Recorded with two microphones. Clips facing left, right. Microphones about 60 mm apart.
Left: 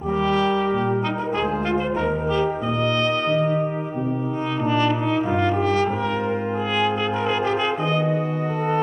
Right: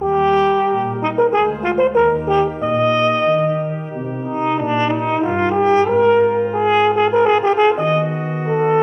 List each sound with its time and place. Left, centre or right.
0.1 s brass instrument: right
4.6 s brass instrument: right